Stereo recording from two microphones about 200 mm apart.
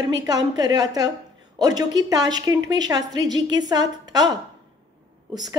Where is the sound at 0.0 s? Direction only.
20° right (ahead or behind).